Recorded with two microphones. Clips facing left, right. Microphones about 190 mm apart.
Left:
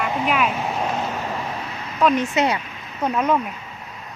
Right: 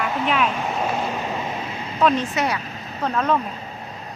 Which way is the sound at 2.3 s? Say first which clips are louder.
Left 3 dB; 25° left (ahead or behind).